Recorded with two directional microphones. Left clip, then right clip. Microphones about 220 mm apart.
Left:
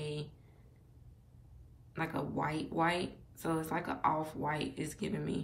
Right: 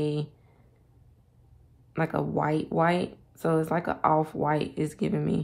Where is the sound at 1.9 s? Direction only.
25° right (ahead or behind).